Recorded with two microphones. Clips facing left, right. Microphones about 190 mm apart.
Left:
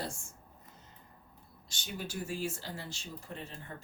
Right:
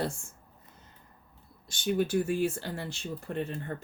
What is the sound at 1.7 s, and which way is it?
Speech, 55° right (ahead or behind).